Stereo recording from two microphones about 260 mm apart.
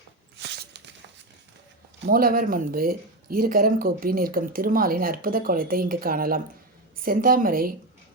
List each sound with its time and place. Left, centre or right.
2.0 s speech: right